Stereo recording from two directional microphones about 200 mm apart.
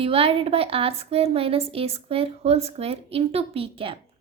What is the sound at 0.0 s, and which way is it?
A woman's voice, 30° right (ahead or behind).